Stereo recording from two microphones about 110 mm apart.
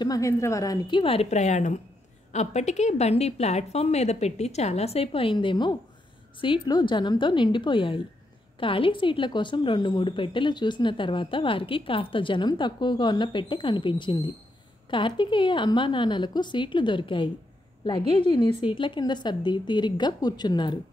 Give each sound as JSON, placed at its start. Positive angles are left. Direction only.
{"t": 0.0, "sound": "a woman's voice", "side_deg": 30}
{"t": 0.8, "sound": "a woman's voice", "side_deg": 45}
{"t": 1.1, "sound": "a woman's voice", "side_deg": 80}